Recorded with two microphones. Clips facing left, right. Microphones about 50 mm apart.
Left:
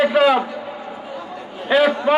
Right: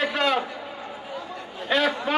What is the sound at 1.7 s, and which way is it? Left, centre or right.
Speech, centre.